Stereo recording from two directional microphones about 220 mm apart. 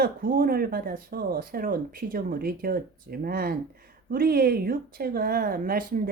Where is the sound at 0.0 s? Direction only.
40° right (ahead or behind).